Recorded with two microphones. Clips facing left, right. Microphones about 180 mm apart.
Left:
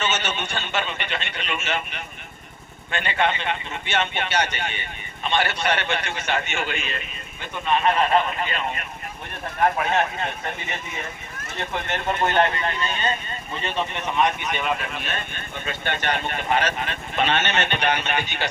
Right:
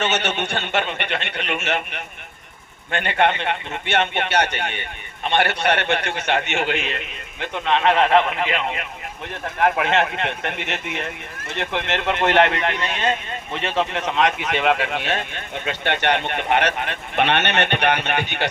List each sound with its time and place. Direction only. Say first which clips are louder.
0.0 s a man's voice: right 4 dB; 65° right (ahead or behind)